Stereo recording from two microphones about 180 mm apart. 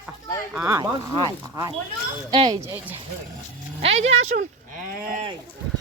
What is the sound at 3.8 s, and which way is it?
Speech, 35° right (ahead or behind).